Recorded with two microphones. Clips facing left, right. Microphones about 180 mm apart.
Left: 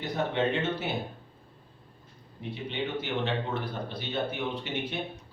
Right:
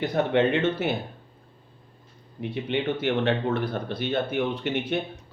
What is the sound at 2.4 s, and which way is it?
Speech, 65° right (ahead or behind).